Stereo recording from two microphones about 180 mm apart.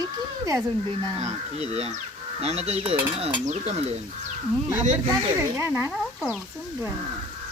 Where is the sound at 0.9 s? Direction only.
35° right (ahead or behind).